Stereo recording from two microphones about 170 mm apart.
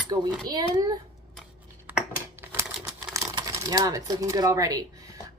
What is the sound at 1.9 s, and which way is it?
Crumpling, 10° right (ahead or behind).